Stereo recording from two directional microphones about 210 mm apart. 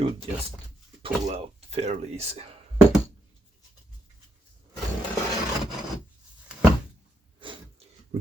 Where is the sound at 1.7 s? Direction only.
30° right (ahead or behind).